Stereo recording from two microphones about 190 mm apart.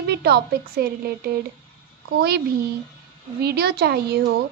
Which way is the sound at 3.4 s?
55° right (ahead or behind).